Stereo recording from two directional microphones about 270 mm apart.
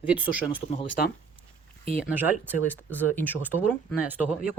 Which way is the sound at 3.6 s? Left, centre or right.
Centre.